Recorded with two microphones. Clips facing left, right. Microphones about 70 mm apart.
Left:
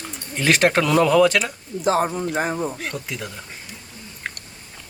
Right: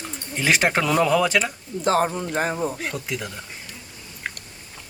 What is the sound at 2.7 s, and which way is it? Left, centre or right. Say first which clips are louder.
Speech: right 1 dB; centre.